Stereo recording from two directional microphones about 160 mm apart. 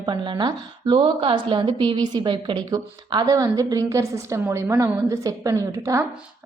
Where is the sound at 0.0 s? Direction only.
30° right (ahead or behind).